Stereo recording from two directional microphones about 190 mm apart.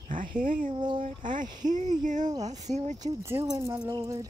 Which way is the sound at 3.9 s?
20° right (ahead or behind).